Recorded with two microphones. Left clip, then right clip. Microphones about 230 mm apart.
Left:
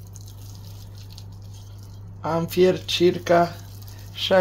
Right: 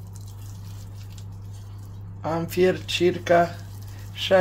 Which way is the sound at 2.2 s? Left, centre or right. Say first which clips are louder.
Left 2 dB; left.